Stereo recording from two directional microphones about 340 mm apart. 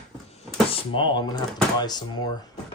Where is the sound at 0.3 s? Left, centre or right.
Centre.